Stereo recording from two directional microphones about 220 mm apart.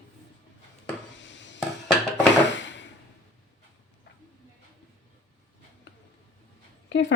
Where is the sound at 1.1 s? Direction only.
55° left (ahead or behind).